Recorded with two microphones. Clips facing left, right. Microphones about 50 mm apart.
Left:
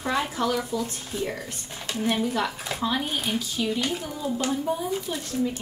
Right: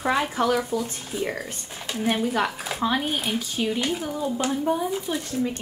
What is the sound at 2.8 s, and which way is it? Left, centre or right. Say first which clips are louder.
Speech: right 3 dB; right.